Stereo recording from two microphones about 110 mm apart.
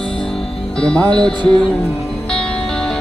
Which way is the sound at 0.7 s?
5° left (ahead or behind).